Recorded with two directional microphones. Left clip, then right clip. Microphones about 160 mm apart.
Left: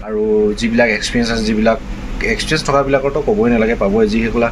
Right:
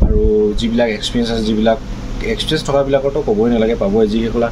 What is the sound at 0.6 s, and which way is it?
Speech, 5° left (ahead or behind).